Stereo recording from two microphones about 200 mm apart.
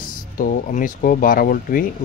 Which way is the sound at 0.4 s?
40° left (ahead or behind).